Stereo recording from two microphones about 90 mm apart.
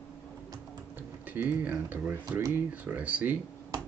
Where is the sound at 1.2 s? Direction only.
20° right (ahead or behind).